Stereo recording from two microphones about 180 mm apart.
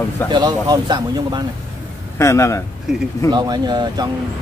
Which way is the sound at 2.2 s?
15° left (ahead or behind).